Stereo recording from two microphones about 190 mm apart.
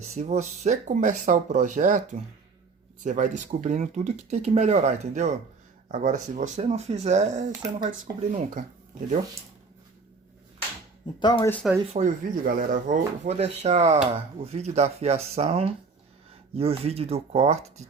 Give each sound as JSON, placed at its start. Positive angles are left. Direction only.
{"t": 0.2, "sound": "speech", "side_deg": -35}
{"t": 11.2, "sound": "speech", "side_deg": 20}
{"t": 11.9, "sound": "speech", "side_deg": -45}